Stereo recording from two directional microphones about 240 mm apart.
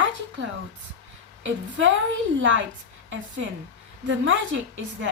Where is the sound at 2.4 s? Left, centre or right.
Right.